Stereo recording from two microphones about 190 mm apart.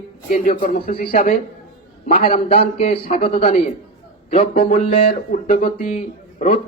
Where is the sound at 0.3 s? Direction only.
45° left (ahead or behind).